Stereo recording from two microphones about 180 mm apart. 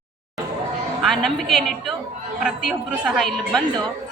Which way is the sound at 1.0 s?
Centre (ahead or behind).